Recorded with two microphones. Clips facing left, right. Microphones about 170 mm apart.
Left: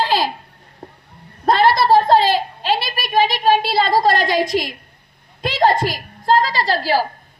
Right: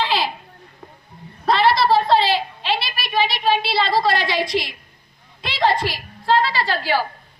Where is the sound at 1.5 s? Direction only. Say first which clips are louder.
Left 3 dB; 50° left (ahead or behind).